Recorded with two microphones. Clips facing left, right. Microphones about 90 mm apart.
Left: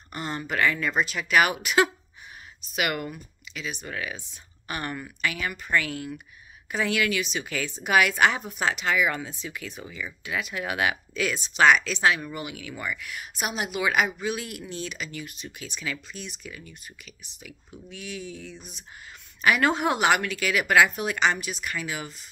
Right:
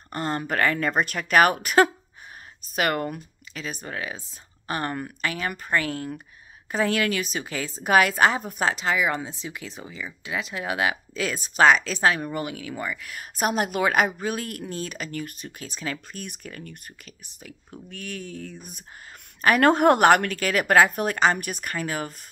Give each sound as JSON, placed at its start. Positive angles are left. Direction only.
{"t": 0.1, "sound": "speech", "side_deg": -45}